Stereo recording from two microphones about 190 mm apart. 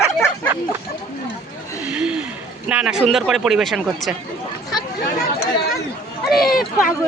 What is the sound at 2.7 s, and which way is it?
Speech, 5° right (ahead or behind).